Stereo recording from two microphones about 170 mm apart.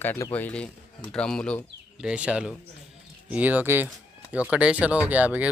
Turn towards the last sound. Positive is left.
turn(degrees=-10)  # may be behind; listen again after turning